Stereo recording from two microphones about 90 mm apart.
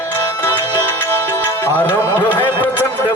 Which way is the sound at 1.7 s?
20° left (ahead or behind).